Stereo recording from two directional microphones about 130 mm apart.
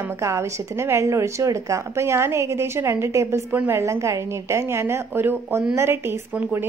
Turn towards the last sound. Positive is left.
turn(degrees=-10)  # may be behind; listen again after turning